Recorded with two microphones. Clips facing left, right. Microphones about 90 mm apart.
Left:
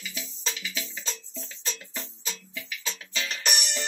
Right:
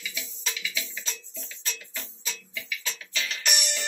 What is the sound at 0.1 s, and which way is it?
Music, 40° left (ahead or behind).